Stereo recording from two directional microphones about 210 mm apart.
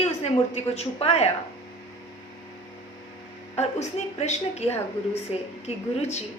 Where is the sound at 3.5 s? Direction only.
30° left (ahead or behind).